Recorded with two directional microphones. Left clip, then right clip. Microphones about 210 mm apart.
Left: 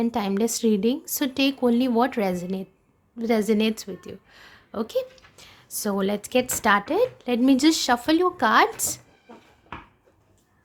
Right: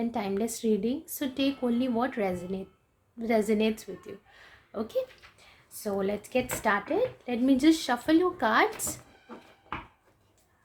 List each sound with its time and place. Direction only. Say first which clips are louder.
0.0 s a woman's voice: left 6 dB; 35° left (ahead or behind)